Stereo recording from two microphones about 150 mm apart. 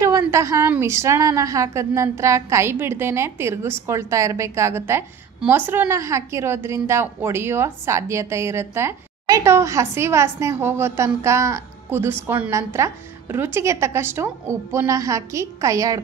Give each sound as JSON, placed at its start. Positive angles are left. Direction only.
{"t": 0.0, "sound": "a woman's voice", "side_deg": -20}